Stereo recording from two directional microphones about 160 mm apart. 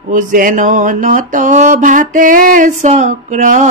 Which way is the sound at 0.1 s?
55° right (ahead or behind).